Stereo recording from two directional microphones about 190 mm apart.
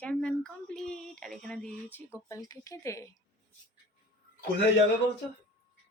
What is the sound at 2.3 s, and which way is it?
Speech, 20° left (ahead or behind).